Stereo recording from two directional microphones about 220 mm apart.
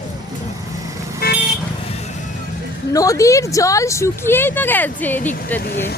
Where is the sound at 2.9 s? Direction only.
15° left (ahead or behind).